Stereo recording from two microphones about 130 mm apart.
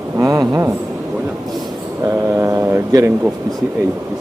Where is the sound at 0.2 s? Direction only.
25° right (ahead or behind).